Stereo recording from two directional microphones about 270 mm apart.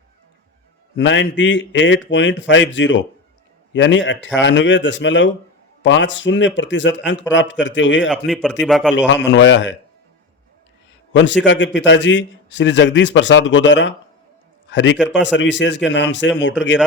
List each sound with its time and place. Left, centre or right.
0.9 s a man's voice: left
8.3 s a man's voice: centre
9.0 s a man's voice: left
11.1 s a man's voice: left